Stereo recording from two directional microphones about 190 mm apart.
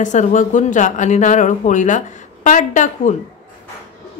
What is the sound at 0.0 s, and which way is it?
Speech, 40° left (ahead or behind).